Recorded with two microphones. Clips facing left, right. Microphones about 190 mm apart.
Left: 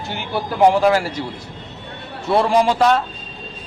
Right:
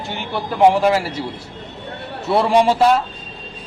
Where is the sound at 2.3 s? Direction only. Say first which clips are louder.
Right 1 dB; centre (ahead or behind).